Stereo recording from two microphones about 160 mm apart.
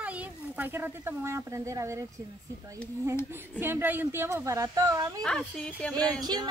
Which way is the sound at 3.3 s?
15° right (ahead or behind).